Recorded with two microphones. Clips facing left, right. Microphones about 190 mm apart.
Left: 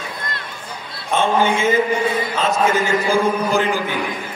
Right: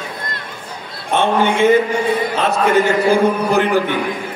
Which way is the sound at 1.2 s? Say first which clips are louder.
Right 3 dB; 65° right (ahead or behind).